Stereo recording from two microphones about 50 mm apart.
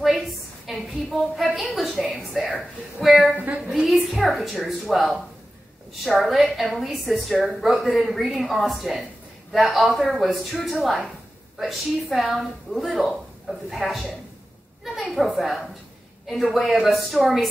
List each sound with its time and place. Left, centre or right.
0.7 s a woman's voice: centre